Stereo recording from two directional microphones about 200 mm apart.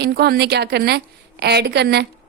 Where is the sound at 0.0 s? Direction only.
50° right (ahead or behind).